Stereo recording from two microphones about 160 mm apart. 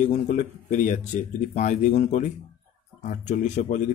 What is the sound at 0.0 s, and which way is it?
Speech, 50° left (ahead or behind).